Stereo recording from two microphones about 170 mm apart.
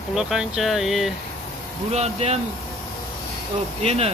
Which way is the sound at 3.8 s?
35° right (ahead or behind).